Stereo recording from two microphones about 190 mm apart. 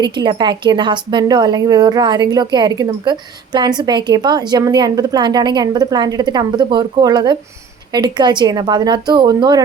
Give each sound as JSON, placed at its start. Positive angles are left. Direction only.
{"t": 0.0, "sound": "speech", "side_deg": -25}